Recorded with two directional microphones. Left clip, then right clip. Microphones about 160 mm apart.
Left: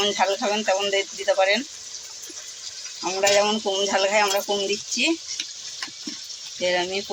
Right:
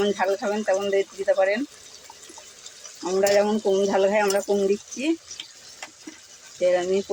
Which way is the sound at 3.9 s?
55° right (ahead or behind).